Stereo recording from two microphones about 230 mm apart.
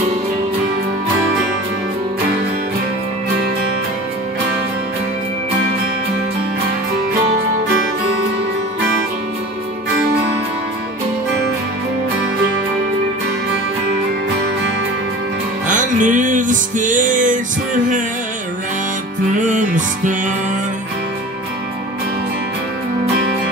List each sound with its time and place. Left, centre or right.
15.6 s music: right
19.4 s music: right